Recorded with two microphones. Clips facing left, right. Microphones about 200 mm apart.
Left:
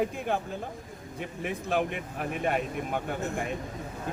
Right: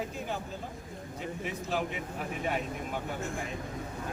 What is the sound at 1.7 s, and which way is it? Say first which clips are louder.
Speech: left 5 dB; 55° left (ahead or behind).